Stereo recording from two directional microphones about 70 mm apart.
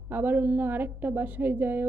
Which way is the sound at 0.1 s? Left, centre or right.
Right.